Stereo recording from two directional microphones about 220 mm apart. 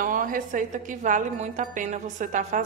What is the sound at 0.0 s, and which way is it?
A woman's voice, 40° right (ahead or behind).